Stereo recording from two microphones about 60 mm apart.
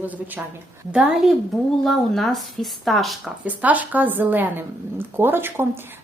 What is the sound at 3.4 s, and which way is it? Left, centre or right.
Speech, right.